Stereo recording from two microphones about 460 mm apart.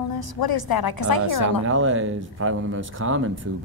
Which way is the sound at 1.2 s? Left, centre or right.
Right.